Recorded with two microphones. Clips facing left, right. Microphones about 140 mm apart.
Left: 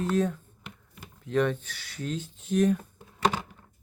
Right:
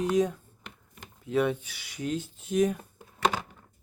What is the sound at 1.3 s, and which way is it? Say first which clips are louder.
Speech: even; 10° right (ahead or behind).